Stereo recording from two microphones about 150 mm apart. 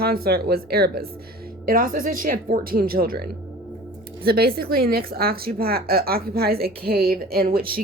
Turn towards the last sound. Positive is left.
turn(degrees=-80)